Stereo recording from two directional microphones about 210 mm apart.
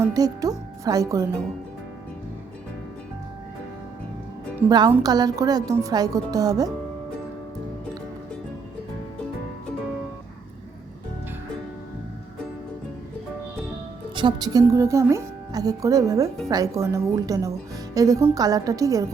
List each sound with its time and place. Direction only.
0.0 s speech: 15° right (ahead or behind)
4.7 s speech: 20° right (ahead or behind)
14.2 s speech: 20° right (ahead or behind)